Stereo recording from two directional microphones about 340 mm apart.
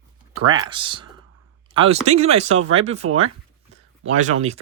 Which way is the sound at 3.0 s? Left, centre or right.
Right.